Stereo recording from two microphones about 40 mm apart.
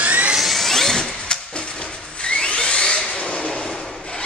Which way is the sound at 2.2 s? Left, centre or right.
Left.